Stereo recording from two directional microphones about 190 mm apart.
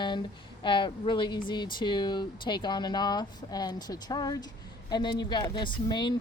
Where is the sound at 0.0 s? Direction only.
25° left (ahead or behind).